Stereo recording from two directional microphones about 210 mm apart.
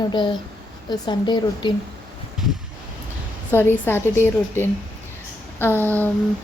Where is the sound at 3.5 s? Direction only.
10° left (ahead or behind).